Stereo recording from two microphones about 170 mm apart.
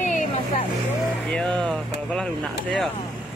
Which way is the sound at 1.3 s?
5° left (ahead or behind).